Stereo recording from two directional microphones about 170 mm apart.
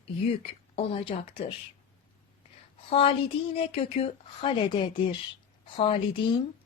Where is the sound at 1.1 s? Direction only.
40° left (ahead or behind).